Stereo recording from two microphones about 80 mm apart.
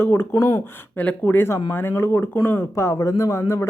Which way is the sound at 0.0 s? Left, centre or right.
Left.